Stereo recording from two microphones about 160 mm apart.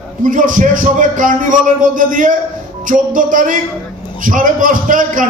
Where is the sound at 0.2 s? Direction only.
55° right (ahead or behind).